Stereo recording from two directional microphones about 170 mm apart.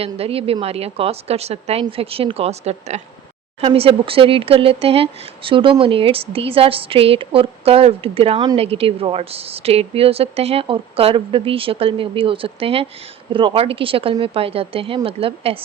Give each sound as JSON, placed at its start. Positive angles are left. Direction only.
{"t": 0.0, "sound": "a woman's voice", "side_deg": -35}